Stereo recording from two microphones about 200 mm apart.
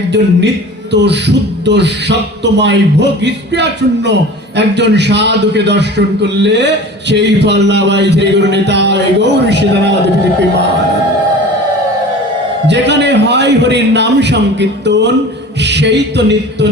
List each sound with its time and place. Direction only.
0.1 s a man's voice: 60° right (ahead or behind)
12.6 s a man's voice: 60° right (ahead or behind)